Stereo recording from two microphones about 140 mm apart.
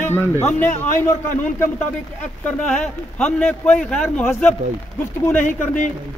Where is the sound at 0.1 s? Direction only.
15° left (ahead or behind).